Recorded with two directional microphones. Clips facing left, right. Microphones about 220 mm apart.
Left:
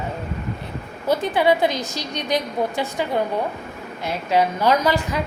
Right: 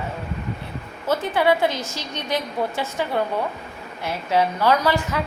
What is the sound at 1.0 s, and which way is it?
A woman's voice, 15° left (ahead or behind).